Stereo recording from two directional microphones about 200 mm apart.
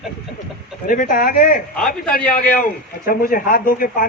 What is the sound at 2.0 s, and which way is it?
Speech, 5° left (ahead or behind).